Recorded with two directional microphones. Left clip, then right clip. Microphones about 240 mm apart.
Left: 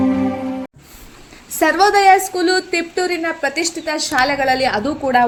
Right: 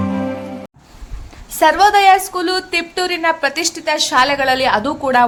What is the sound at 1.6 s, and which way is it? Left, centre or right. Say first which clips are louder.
A woman's voice: right 2 dB; centre.